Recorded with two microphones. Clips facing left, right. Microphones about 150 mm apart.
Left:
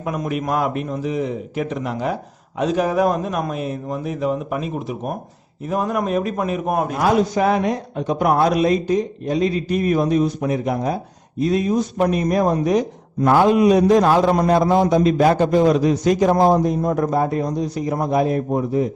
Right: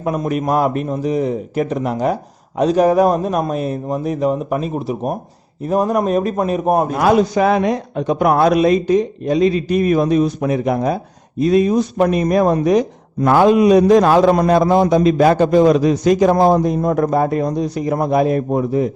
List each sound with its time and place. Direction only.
0.0 s a man's voice: 40° right (ahead or behind)
6.9 s a man's voice: 80° right
13.2 s a man's voice: 90° right